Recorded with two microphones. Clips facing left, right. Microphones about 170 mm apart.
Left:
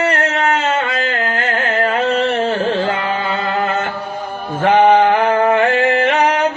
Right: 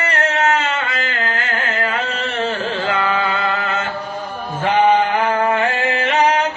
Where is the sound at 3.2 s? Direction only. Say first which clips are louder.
Left 2 dB; 50° left (ahead or behind).